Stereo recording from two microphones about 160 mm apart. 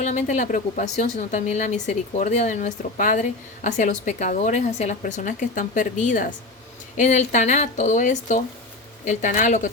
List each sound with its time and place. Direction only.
0.0 s a woman's voice: 50° left (ahead or behind)